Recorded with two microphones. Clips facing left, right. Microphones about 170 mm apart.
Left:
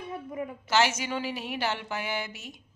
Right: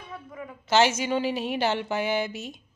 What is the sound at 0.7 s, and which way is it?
A woman's voice, 25° right (ahead or behind).